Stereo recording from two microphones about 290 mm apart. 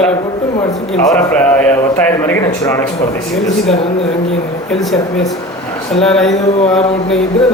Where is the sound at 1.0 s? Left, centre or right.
Centre.